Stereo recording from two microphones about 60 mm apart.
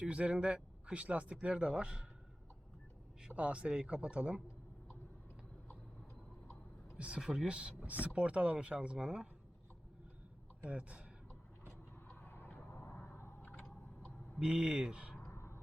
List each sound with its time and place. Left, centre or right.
0.0 s speech: centre
3.3 s speech: right
6.9 s speech: centre
7.8 s speech: right
10.7 s speech: centre
12.0 s a sound: left
14.3 s speech: centre
15.3 s a sound: left